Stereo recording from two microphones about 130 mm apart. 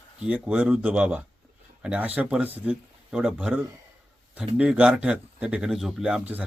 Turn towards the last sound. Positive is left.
turn(degrees=-10)  # may be behind; listen again after turning